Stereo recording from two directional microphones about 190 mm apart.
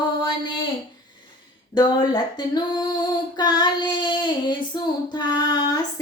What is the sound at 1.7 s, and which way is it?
Female singing, 25° left (ahead or behind).